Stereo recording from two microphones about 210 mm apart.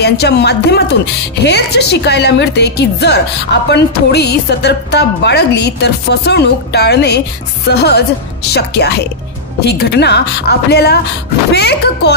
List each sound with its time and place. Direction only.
0.0 s a woman's voice: 50° left (ahead or behind)